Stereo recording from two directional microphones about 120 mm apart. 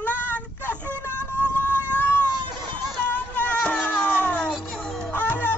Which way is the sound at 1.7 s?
15° right (ahead or behind).